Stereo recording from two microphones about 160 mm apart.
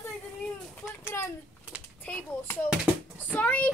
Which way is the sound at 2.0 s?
10° left (ahead or behind).